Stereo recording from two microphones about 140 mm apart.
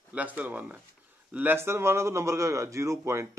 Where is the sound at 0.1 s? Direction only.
10° right (ahead or behind).